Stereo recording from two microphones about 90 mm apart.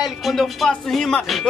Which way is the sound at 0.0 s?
Centre (ahead or behind).